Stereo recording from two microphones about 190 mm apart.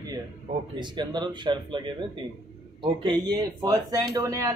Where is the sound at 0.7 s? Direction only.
25° right (ahead or behind).